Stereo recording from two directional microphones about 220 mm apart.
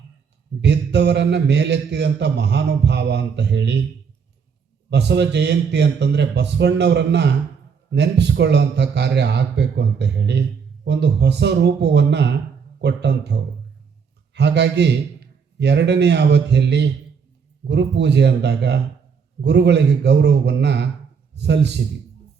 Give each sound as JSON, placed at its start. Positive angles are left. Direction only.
{"t": 0.6, "sound": "a man's voice", "side_deg": -50}
{"t": 4.9, "sound": "a man's voice", "side_deg": -50}